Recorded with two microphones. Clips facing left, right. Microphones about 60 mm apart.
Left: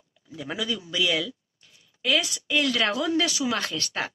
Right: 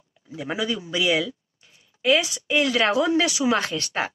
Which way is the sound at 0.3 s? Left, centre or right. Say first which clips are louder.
Right 4 dB; right.